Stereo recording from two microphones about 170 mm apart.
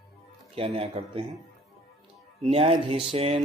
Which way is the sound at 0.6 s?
35° right (ahead or behind).